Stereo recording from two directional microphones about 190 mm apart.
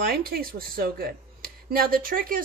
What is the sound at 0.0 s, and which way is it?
A man's voice, 55° right (ahead or behind).